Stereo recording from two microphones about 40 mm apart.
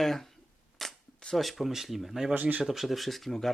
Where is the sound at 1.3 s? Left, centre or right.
Centre.